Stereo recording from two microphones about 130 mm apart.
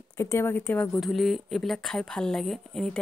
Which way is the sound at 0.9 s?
Centre (ahead or behind).